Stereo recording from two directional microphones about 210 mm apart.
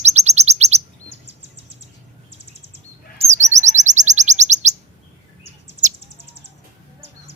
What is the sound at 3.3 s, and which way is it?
Chirp, 35° right (ahead or behind).